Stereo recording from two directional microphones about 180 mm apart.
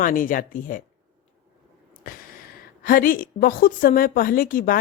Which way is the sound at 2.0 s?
50° left (ahead or behind).